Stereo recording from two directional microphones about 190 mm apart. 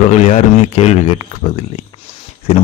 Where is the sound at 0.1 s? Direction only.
35° left (ahead or behind).